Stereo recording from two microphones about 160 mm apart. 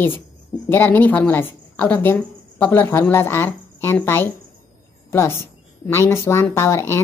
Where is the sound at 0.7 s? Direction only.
10° left (ahead or behind).